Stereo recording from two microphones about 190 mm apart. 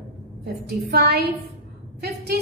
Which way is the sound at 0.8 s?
55° right (ahead or behind).